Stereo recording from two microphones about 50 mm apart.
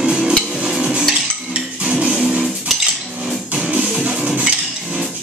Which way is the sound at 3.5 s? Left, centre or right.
Right.